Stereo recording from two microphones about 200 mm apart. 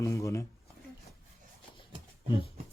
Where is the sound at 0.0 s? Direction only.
15° left (ahead or behind).